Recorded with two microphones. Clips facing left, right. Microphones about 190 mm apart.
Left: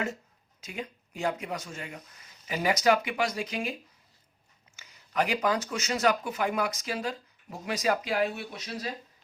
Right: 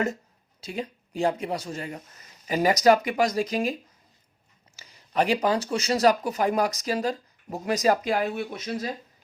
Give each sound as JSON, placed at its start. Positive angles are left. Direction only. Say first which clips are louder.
{"t": 0.6, "sound": "speech", "louder": "right 6 dB", "side_deg": -35}
{"t": 4.8, "sound": "speech", "louder": "right 4 dB", "side_deg": -30}